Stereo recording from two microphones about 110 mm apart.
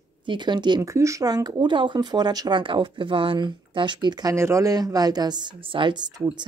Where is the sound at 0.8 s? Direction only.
30° right (ahead or behind).